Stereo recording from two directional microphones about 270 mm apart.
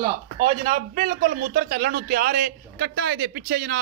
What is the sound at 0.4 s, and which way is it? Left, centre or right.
A man's voice, right.